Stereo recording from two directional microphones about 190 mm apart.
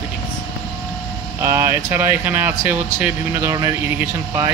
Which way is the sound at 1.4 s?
15° right (ahead or behind).